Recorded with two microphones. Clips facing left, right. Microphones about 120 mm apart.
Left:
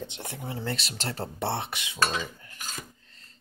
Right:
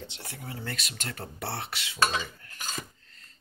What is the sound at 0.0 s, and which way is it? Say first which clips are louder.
Speech: left 5 dB; 20° left (ahead or behind).